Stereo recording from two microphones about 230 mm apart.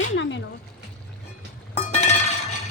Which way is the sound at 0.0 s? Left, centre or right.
Left.